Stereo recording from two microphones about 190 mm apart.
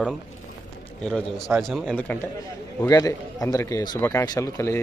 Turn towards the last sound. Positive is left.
turn(degrees=15)  # may be behind; listen again after turning